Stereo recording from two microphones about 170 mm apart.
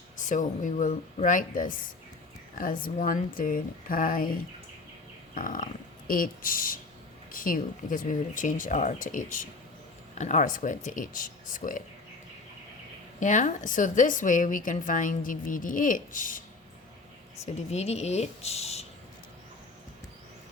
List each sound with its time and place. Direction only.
0.3 s a woman's voice: 50° left (ahead or behind)
5.3 s a sound: 55° left (ahead or behind)
6.1 s a woman's voice: 55° left (ahead or behind)
13.1 s a woman's voice: 50° left (ahead or behind)
17.4 s speech: 40° left (ahead or behind)